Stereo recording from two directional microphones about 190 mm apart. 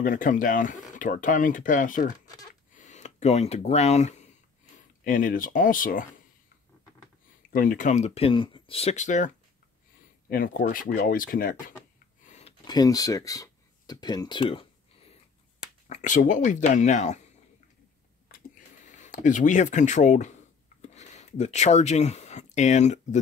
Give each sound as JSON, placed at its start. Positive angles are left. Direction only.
{"t": 0.0, "sound": "speech", "side_deg": 45}
{"t": 2.7, "sound": "a sound", "side_deg": 40}
{"t": 4.7, "sound": "speech", "side_deg": 45}
{"t": 7.5, "sound": "speech", "side_deg": 45}
{"t": 10.3, "sound": "speech", "side_deg": 50}
{"t": 12.2, "sound": "a sound", "side_deg": 40}
{"t": 12.6, "sound": "speech", "side_deg": 20}
{"t": 15.9, "sound": "speech", "side_deg": 40}
{"t": 18.9, "sound": "speech", "side_deg": 40}